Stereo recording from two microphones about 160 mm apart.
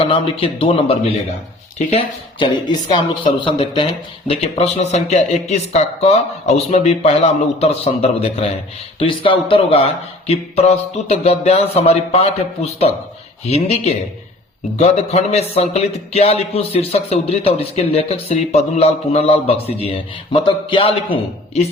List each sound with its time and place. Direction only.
0.0 s speech: 35° left (ahead or behind)